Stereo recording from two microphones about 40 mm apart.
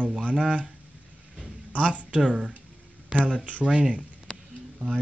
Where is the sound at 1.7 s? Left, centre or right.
Right.